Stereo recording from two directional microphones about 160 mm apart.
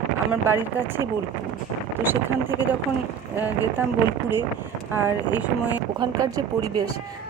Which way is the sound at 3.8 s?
15° right (ahead or behind).